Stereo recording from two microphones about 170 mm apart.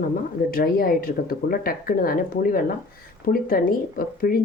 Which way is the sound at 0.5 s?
60° left (ahead or behind).